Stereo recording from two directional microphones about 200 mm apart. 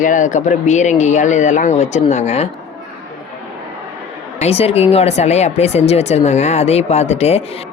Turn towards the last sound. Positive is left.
turn(degrees=30)  # may be behind; listen again after turning